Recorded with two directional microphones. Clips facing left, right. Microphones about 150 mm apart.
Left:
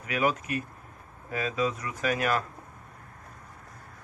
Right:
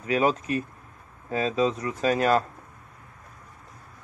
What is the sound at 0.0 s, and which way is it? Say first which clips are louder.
Speech: right 4 dB; 30° right (ahead or behind).